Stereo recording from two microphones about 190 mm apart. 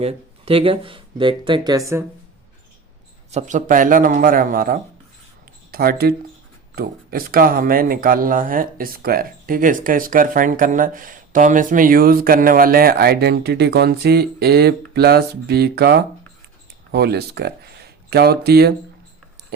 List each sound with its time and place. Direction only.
0.0 s speech: 30° right (ahead or behind)
3.3 s speech: 40° right (ahead or behind); by 18.7 s 55° right (ahead or behind)